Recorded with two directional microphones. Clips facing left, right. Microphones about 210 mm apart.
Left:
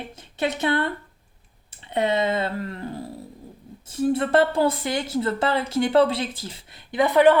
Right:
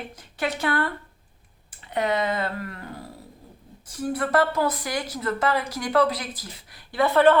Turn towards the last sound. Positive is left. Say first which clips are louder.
# left 2 dB
turn(degrees=15)  # may be behind; listen again after turning